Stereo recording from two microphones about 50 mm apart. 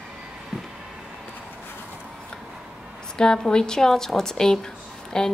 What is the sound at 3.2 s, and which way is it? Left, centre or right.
A woman's voice, centre.